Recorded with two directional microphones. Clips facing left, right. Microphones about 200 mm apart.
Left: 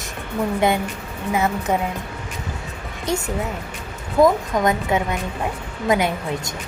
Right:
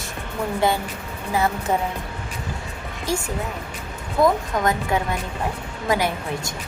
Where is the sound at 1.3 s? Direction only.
20° left (ahead or behind).